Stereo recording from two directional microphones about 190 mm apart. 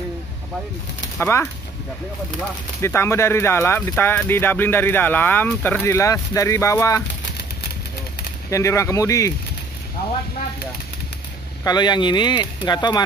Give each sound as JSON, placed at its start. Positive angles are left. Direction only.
{"t": 1.1, "sound": "speech", "side_deg": 10}
{"t": 2.8, "sound": "speech", "side_deg": 15}
{"t": 8.5, "sound": "speech", "side_deg": 15}
{"t": 11.6, "sound": "speech", "side_deg": 20}